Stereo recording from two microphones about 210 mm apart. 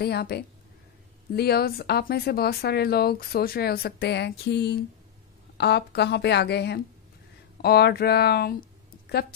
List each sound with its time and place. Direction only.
0.0 s speech: 50° left (ahead or behind)